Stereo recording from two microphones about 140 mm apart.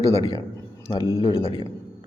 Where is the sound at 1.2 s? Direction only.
40° left (ahead or behind).